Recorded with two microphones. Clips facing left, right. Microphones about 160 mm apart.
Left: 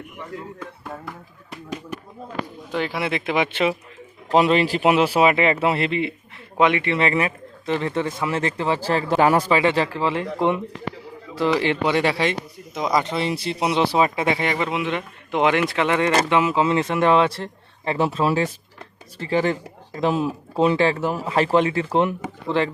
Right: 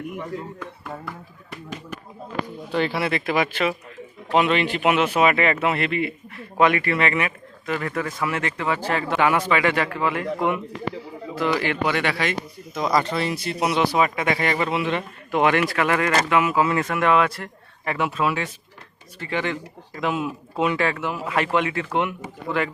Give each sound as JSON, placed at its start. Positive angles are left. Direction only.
{"t": 2.7, "sound": "speech", "side_deg": 10}
{"t": 11.3, "sound": "speech", "side_deg": 30}